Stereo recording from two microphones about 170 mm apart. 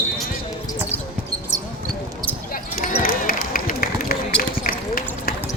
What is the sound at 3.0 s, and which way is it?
Run, 55° left (ahead or behind).